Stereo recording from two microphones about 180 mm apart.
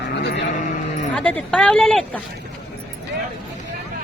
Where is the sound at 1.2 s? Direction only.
5° left (ahead or behind).